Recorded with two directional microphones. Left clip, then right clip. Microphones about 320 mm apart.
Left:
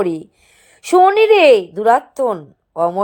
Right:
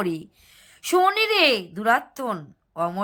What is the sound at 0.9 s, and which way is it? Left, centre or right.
A woman's voice, centre.